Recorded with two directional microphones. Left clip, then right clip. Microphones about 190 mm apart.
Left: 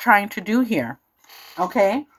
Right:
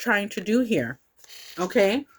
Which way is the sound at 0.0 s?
25° right (ahead or behind).